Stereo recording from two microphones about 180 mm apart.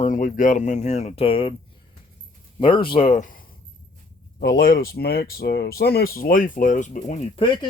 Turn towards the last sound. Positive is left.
turn(degrees=40)  # may be behind; listen again after turning